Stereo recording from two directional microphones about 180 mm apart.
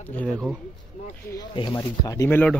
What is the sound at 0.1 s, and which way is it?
Speech, 10° left (ahead or behind).